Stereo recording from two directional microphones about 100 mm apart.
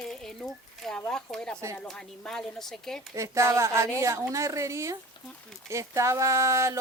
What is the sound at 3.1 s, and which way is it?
Speech, 30° right (ahead or behind).